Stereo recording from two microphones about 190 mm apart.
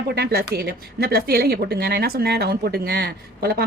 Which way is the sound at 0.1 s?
55° right (ahead or behind).